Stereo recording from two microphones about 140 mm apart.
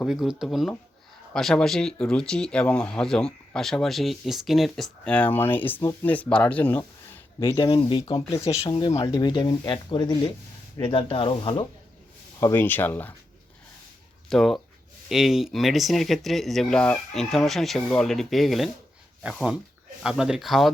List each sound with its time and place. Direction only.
0.0 s speech: 5° right (ahead or behind); by 6.8 s 15° left (ahead or behind)
7.3 s speech: 25° left (ahead or behind)
8.3 s speech: 20° left (ahead or behind); by 11.6 s 40° left (ahead or behind)
12.4 s speech: 15° left (ahead or behind)
14.3 s speech: centre (ahead or behind)